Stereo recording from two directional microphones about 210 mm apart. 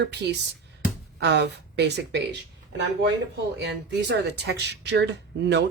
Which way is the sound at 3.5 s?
55° right (ahead or behind).